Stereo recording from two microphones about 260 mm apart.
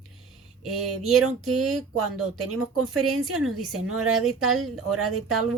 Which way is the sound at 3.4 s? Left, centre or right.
Centre.